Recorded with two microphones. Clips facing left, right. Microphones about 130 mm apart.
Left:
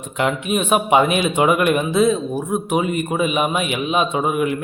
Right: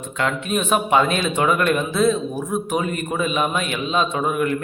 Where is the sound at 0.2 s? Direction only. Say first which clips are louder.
Left 3 dB; 15° left (ahead or behind).